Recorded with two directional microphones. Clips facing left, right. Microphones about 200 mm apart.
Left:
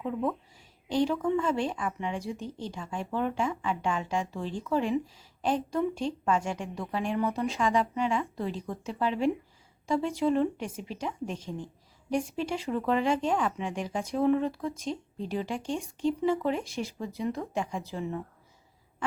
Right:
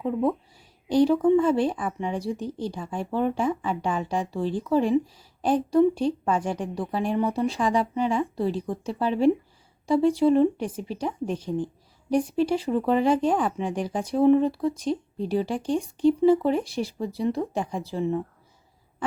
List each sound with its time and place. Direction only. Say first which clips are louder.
0.0 s speech: right 6 dB; 35° right (ahead or behind)